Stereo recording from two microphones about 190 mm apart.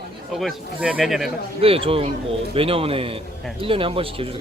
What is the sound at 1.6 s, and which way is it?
Speech, 30° right (ahead or behind).